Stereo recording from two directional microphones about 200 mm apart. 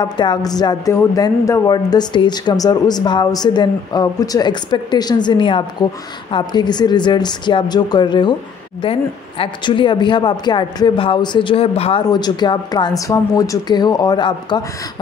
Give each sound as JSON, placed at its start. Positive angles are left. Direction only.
{"t": 0.0, "sound": "speech", "side_deg": 20}